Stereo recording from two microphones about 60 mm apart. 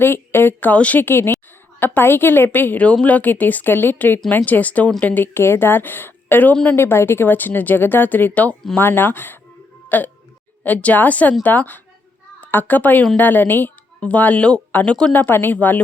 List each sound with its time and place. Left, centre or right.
0.0 s speech: left
0.7 s speech: left
1.0 s speech: left
2.8 s speech: left
6.7 s a child's voice: left